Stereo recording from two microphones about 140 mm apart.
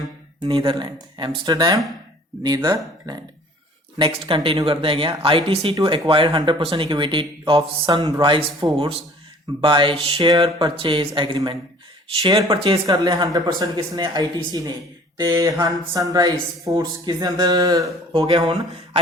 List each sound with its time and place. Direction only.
0.4 s speech: 40° right (ahead or behind)
12.5 s speech: 40° right (ahead or behind)
12.8 s speech: 30° right (ahead or behind)
18.1 s speech: 40° right (ahead or behind)